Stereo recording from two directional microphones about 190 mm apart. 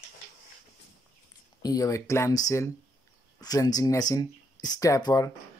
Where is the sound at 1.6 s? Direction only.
20° left (ahead or behind).